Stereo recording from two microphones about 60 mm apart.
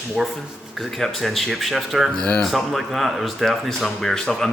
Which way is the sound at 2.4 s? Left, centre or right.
Centre.